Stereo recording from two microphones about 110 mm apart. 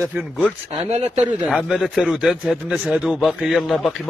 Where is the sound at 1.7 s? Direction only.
Centre (ahead or behind).